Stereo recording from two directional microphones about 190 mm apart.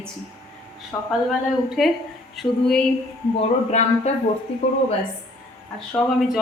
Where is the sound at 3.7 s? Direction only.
35° left (ahead or behind).